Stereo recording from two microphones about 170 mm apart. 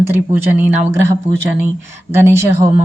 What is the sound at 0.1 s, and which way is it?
Speech, 15° right (ahead or behind).